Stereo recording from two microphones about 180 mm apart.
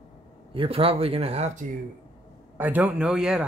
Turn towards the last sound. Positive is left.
turn(degrees=-5)  # may be behind; listen again after turning